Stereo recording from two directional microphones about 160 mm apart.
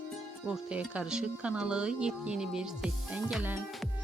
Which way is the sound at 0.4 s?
5° right (ahead or behind).